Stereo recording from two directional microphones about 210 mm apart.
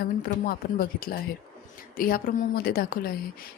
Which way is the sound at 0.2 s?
45° left (ahead or behind).